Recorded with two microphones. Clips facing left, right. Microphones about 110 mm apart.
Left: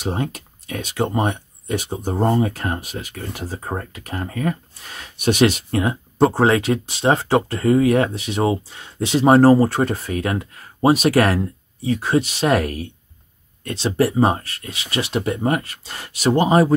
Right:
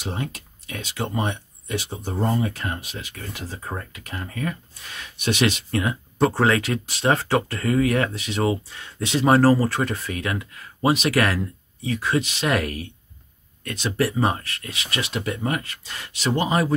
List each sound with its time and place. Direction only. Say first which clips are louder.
0.0 s speech: left 6 dB; 45° left (ahead or behind)